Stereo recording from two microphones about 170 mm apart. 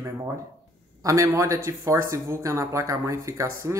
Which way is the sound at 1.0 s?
20° right (ahead or behind).